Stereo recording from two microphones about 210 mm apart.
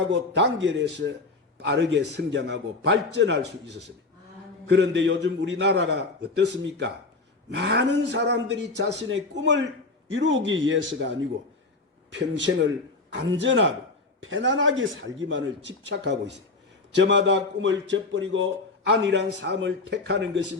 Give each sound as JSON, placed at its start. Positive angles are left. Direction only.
{"t": 0.1, "sound": "a man's voice", "side_deg": -60}
{"t": 4.6, "sound": "a man's voice", "side_deg": -60}
{"t": 12.3, "sound": "a man's voice", "side_deg": -60}